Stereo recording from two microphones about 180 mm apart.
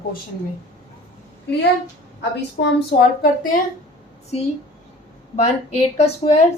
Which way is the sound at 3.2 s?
50° left (ahead or behind).